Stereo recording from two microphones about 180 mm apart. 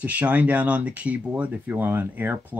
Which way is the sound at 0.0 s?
5° right (ahead or behind).